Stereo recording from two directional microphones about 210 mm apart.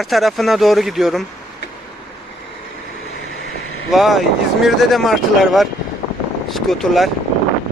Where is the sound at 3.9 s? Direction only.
Centre (ahead or behind).